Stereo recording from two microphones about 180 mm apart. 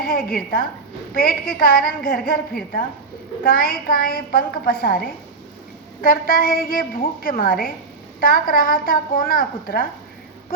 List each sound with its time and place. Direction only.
0.0 s a woman's voice: 55° left (ahead or behind)
3.4 s a woman's voice: 55° left (ahead or behind)
6.0 s a woman's voice: 50° left (ahead or behind)